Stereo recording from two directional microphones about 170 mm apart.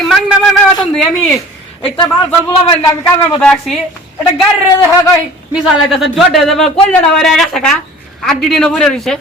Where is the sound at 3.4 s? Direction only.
5° left (ahead or behind).